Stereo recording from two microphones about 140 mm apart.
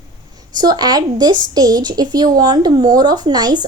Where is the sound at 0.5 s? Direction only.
30° right (ahead or behind).